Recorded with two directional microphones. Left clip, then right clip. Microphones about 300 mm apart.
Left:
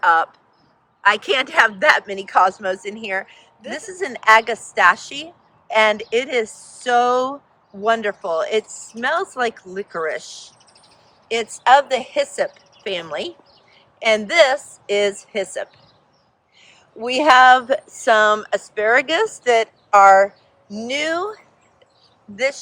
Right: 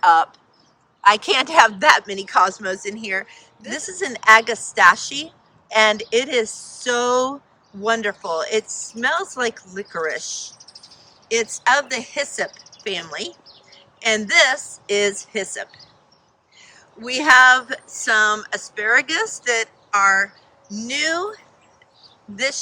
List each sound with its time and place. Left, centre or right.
0.0 s speech: centre
10.6 s chirp: centre
11.3 s speech: centre
12.5 s speech: centre
12.8 s speech: centre